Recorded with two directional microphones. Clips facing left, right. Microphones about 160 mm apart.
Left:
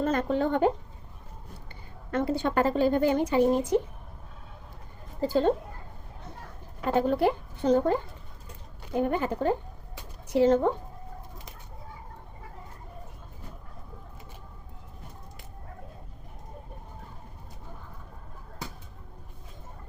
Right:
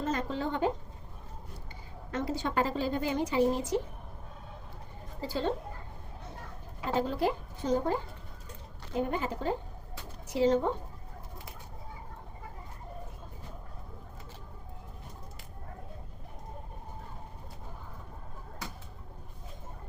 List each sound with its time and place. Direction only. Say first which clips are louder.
0.0 s a woman's voice: left 6 dB; 55° left (ahead or behind)
2.1 s speech: left 5 dB; 55° left (ahead or behind)
5.2 s speech: left 9 dB; 45° left (ahead or behind)
6.9 s speech: left 5 dB; 60° left (ahead or behind)
9.0 s speech: left 9 dB; 55° left (ahead or behind)